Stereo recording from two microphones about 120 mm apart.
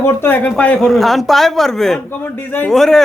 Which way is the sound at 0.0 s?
20° left (ahead or behind).